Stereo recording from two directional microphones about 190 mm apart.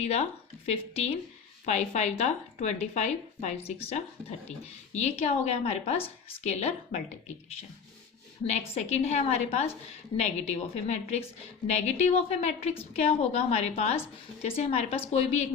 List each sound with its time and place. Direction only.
0.0 s speech: 35° left (ahead or behind)
8.4 s speech: 35° left (ahead or behind)